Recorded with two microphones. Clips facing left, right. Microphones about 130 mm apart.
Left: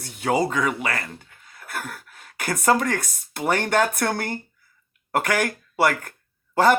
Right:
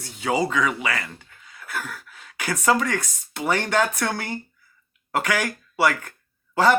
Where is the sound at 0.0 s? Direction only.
55° left (ahead or behind).